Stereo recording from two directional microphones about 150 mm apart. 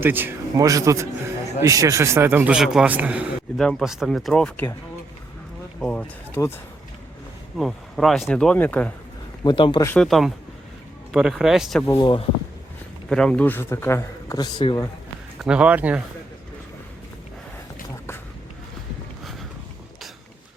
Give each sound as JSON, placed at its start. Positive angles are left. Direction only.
{"t": 0.0, "sound": "a man's voice", "side_deg": -15}
{"t": 3.6, "sound": "speech", "side_deg": 0}
{"t": 5.8, "sound": "speech", "side_deg": 10}
{"t": 7.6, "sound": "speech", "side_deg": 0}
{"t": 9.4, "sound": "a man's voice", "side_deg": 30}
{"t": 10.0, "sound": "speech", "side_deg": 0}
{"t": 11.9, "sound": "a man's voice", "side_deg": 30}
{"t": 13.1, "sound": "a man's voice", "side_deg": 5}
{"t": 14.3, "sound": "speech", "side_deg": 30}
{"t": 15.4, "sound": "a man's voice", "side_deg": -5}